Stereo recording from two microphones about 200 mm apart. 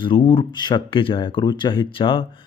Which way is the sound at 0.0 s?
25° left (ahead or behind).